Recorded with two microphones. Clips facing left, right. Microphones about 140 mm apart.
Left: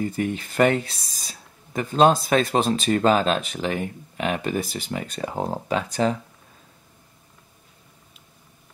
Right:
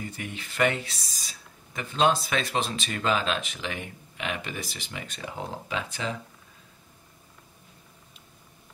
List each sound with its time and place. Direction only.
0.0 s speech: 45° left (ahead or behind)